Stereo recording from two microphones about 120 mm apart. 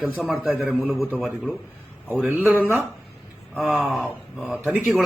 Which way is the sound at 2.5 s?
20° right (ahead or behind).